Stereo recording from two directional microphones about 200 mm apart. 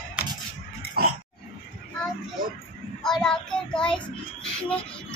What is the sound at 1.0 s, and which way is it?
Roar, 50° right (ahead or behind).